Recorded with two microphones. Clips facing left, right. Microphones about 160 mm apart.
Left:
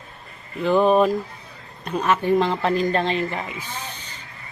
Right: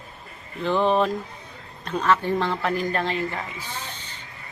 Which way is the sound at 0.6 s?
10° left (ahead or behind).